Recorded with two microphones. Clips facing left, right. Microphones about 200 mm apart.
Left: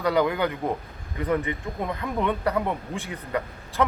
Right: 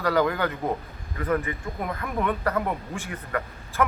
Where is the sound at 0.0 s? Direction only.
15° left (ahead or behind).